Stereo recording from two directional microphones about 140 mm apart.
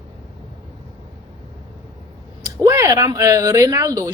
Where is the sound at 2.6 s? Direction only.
25° right (ahead or behind).